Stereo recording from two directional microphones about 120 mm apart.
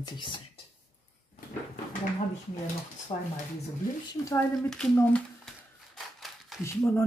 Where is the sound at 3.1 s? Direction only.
45° left (ahead or behind).